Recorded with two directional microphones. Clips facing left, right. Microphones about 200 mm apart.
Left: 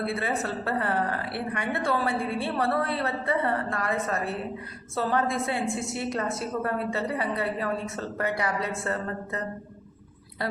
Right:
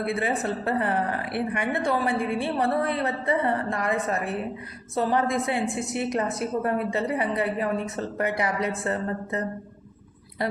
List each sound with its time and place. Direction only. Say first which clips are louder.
0.0 s a woman's voice: right 2 dB; 15° right (ahead or behind)